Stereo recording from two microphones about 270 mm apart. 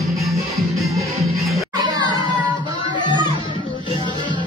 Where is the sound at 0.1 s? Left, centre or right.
Centre.